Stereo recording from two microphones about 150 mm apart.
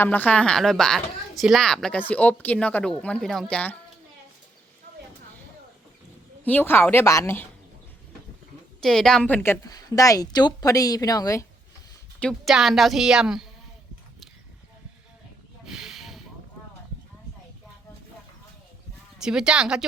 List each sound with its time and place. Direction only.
0.0 s a woman's voice: 10° left (ahead or behind)
6.4 s a woman's voice: 10° left (ahead or behind)
8.8 s a woman's voice: 5° left (ahead or behind); by 11.4 s 20° left (ahead or behind)
12.2 s a woman's voice: centre (ahead or behind)
15.6 s snake: 5° right (ahead or behind)
19.2 s a woman's voice: 5° right (ahead or behind)